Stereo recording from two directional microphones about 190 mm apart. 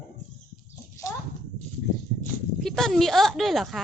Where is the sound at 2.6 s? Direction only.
Centre (ahead or behind).